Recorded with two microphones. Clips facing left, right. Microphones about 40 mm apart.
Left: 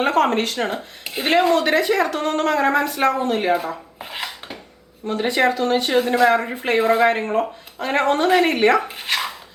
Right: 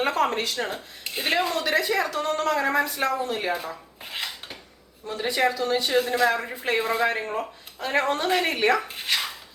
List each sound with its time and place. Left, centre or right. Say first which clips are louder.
0.0 s speech: left 6 dB; left
5.0 s speech: left 5 dB; left
8.9 s speech: left 3 dB; centre